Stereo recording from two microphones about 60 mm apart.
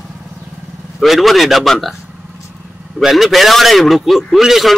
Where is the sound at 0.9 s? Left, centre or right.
Centre.